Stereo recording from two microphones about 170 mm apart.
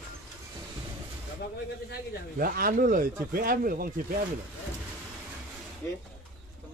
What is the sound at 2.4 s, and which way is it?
Speech, 60° right (ahead or behind).